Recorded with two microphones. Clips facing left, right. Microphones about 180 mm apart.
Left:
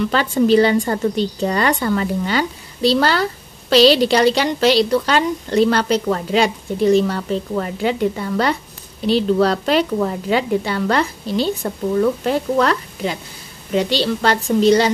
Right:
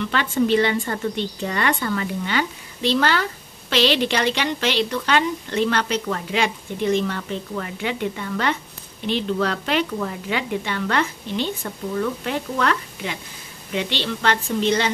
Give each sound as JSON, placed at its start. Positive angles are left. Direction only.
{"t": 0.0, "sound": "a woman's voice", "side_deg": 35}